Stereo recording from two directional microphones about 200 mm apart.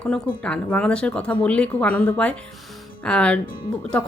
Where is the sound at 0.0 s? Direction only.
5° left (ahead or behind).